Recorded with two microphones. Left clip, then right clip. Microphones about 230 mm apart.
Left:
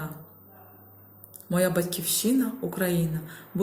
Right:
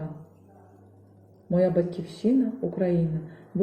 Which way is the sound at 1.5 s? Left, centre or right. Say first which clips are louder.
Right 2 dB; centre.